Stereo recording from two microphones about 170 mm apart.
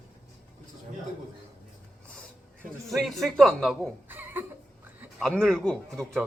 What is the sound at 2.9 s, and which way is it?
Speech, centre (ahead or behind).